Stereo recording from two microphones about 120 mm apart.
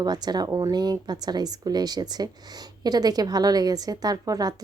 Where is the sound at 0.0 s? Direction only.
35° right (ahead or behind).